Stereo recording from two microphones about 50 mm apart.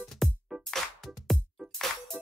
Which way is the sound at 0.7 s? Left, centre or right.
Centre.